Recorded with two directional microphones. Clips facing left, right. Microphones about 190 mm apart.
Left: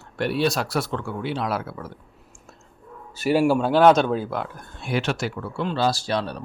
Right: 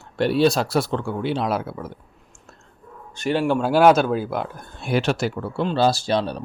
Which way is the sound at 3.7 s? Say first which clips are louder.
Right 2 dB; 5° right (ahead or behind).